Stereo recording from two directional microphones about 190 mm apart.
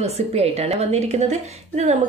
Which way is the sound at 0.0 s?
35° right (ahead or behind).